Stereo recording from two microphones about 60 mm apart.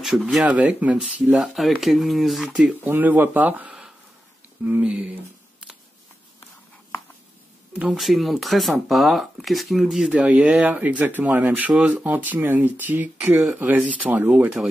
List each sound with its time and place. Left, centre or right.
0.0 s speech: centre
0.5 s speech: right
1.4 s speech: centre
2.8 s speech: right
4.8 s speech: right
7.9 s speech: centre
10.1 s speech: right